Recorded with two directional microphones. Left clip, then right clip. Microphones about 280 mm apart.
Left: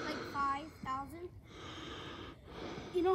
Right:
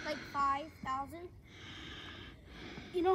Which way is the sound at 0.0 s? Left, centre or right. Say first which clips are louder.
Even; centre.